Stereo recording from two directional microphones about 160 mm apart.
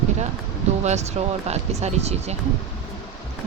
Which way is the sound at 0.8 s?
45° right (ahead or behind).